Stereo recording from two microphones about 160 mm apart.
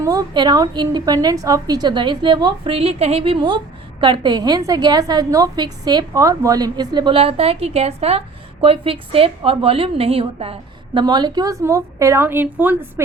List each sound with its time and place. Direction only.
0.0 s a woman's voice: 25° right (ahead or behind)